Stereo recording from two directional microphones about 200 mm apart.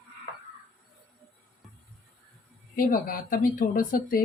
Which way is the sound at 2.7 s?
45° left (ahead or behind).